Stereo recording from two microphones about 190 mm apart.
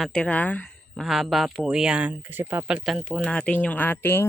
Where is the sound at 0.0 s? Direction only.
5° left (ahead or behind).